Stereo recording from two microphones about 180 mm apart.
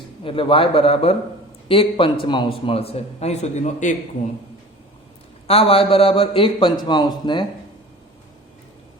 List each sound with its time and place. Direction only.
0.3 s a man's voice: 30° left (ahead or behind)
5.5 s a man's voice: 35° left (ahead or behind)